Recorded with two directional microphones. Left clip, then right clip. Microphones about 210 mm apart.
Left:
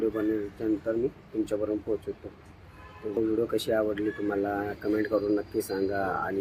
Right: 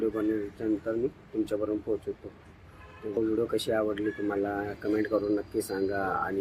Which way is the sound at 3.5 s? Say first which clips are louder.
Left 1 dB; centre (ahead or behind).